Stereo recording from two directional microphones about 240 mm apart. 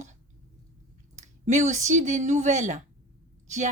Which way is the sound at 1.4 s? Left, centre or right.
Right.